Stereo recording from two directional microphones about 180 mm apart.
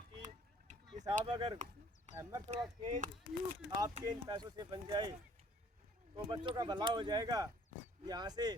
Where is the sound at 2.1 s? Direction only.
15° right (ahead or behind).